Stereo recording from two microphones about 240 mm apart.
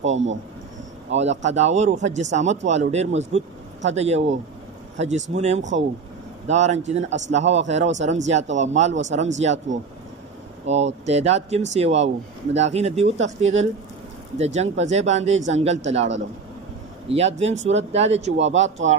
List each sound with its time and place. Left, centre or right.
0.0 s speech: right
17.4 s speech: right
18.4 s speech: right